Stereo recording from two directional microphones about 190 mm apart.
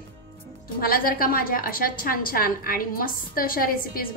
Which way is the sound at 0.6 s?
50° left (ahead or behind).